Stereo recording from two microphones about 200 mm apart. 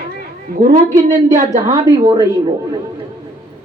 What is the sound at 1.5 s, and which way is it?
Speech, 15° right (ahead or behind).